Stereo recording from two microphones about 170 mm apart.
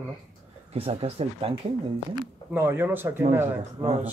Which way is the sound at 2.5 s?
10° right (ahead or behind).